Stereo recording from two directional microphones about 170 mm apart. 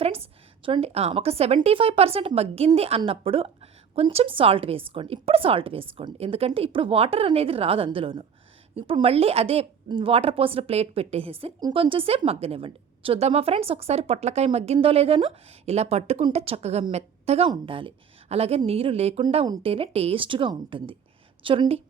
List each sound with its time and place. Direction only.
0.6 s a woman's voice: 35° right (ahead or behind)